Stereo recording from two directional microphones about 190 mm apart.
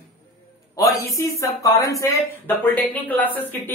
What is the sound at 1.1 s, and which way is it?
Speech, 15° left (ahead or behind).